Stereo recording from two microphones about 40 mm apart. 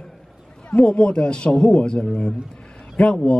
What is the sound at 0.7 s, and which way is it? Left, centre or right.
A man's voice, left.